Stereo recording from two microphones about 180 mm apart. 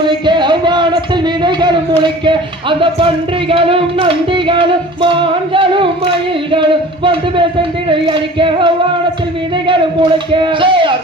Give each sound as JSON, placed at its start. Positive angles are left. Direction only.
{"t": 0.0, "sound": "music", "side_deg": -25}